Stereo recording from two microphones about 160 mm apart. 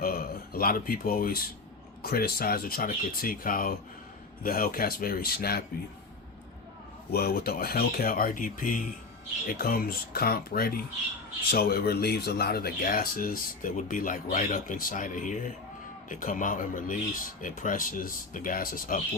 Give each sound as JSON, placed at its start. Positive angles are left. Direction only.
{"t": 0.0, "sound": "speech", "side_deg": 65}
{"t": 7.1, "sound": "speech", "side_deg": 75}
{"t": 9.5, "sound": "speech", "side_deg": 65}